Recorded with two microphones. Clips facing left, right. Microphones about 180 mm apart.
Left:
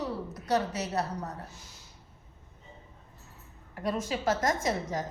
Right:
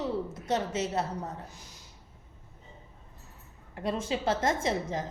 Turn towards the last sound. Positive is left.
turn(degrees=-30)  # may be behind; listen again after turning